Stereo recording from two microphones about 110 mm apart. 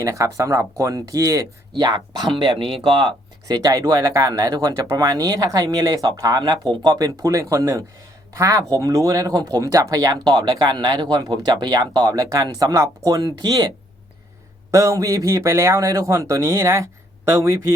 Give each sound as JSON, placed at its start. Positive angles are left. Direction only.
{"t": 0.0, "sound": "speech", "side_deg": -30}
{"t": 3.4, "sound": "speech", "side_deg": -35}
{"t": 14.7, "sound": "speech", "side_deg": -30}